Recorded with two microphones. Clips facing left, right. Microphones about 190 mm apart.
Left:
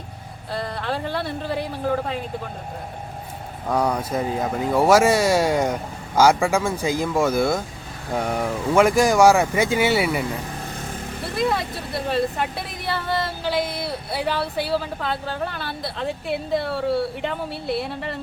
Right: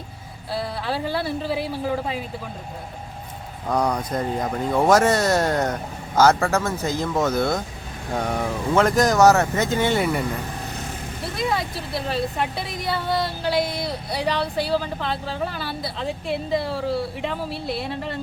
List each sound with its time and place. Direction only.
0.5 s speech: 5° right (ahead or behind)
3.7 s speech: 5° left (ahead or behind)
11.3 s speech: centre (ahead or behind)